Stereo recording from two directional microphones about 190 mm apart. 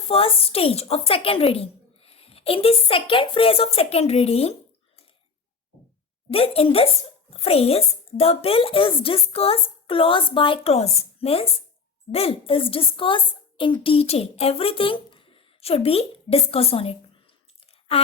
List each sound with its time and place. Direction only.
0.1 s a woman's voice: 30° left (ahead or behind)
6.3 s a woman's voice: 30° left (ahead or behind)